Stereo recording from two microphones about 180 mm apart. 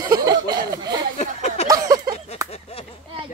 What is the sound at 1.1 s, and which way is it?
Speech, 40° left (ahead or behind).